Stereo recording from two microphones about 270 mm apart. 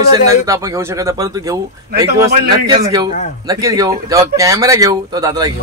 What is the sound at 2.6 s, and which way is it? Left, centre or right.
A man's voice, centre.